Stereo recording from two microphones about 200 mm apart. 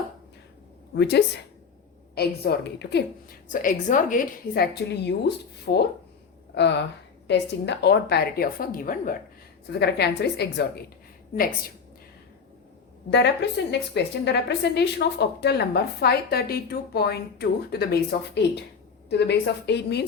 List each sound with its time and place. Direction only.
0.9 s a woman's voice: 55° left (ahead or behind)
6.5 s a woman's voice: 60° left (ahead or behind)
13.1 s a woman's voice: 60° left (ahead or behind)